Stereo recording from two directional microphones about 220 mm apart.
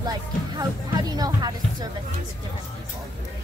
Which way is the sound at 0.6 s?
15° right (ahead or behind).